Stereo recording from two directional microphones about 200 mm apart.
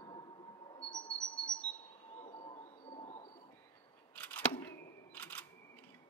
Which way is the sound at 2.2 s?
25° left (ahead or behind).